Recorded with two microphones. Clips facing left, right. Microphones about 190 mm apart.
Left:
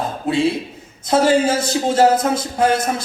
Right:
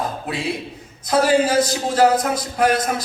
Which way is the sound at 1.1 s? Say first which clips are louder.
Left 1 dB; 25° left (ahead or behind).